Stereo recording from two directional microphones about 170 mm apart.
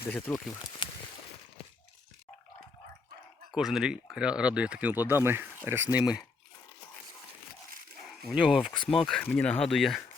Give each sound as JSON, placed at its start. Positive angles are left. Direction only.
{"t": 0.1, "sound": "speech", "side_deg": 10}
{"t": 0.8, "sound": "a sound", "side_deg": 25}
{"t": 3.5, "sound": "speech", "side_deg": -5}
{"t": 8.3, "sound": "speech", "side_deg": -5}